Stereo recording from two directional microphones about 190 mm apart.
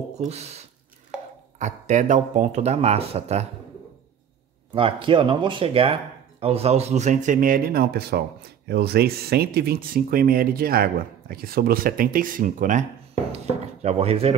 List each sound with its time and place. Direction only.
0.2 s speech: 35° right (ahead or behind)
1.1 s a sound: 5° right (ahead or behind)
1.6 s speech: 40° right (ahead or behind)
4.7 s speech: 25° right (ahead or behind)
13.8 s speech: 30° right (ahead or behind)